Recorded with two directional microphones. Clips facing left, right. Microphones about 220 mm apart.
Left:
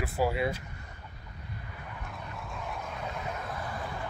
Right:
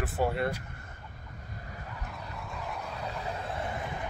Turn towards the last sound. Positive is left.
turn(degrees=-25)  # may be behind; listen again after turning